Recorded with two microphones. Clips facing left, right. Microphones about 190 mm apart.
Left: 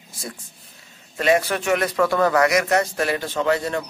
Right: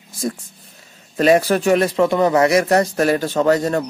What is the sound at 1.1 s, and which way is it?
Speech, 35° right (ahead or behind).